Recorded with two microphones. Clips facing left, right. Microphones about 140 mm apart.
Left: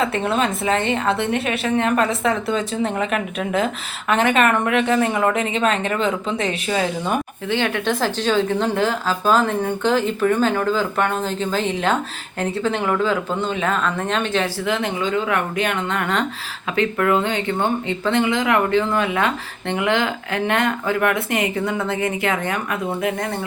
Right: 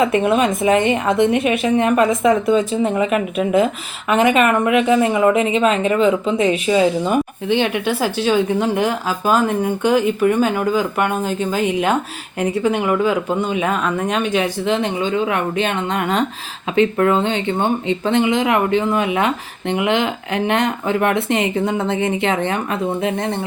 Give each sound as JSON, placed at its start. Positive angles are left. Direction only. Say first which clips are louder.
{"t": 0.0, "sound": "a woman's voice", "louder": "right 5 dB", "side_deg": -15}